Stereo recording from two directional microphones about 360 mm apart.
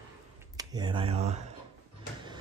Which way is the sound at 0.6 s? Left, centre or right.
Centre.